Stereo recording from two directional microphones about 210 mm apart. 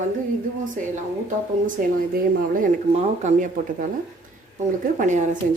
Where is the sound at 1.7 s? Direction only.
40° right (ahead or behind).